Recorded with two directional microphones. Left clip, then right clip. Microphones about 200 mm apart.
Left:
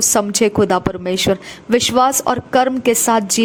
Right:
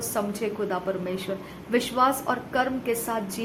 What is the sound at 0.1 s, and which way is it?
A woman's voice, 50° left (ahead or behind).